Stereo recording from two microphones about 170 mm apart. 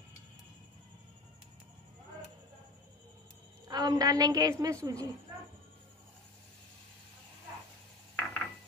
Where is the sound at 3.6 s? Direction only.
20° right (ahead or behind).